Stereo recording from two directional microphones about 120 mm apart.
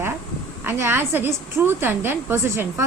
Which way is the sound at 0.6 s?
20° right (ahead or behind).